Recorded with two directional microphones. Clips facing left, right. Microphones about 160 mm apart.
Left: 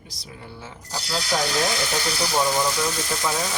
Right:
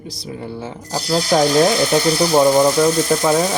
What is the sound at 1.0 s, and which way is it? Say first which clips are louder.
Speech: right 10 dB; 50° right (ahead or behind).